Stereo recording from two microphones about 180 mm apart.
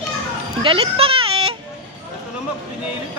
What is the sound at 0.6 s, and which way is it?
Baby cry, 30° right (ahead or behind).